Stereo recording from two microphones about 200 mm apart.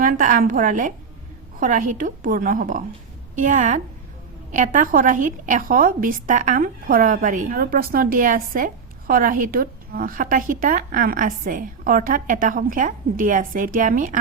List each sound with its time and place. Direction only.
0.0 s a woman's voice: 40° right (ahead or behind)